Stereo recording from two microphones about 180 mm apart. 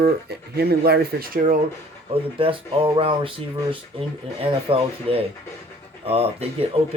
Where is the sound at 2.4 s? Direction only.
30° right (ahead or behind).